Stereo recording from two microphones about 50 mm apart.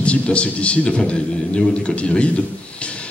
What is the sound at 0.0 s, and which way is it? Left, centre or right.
A man's voice, left.